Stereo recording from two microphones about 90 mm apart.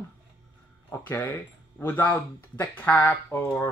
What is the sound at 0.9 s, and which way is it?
Speech, 20° left (ahead or behind).